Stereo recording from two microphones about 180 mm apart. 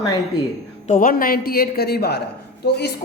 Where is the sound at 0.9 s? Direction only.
50° left (ahead or behind).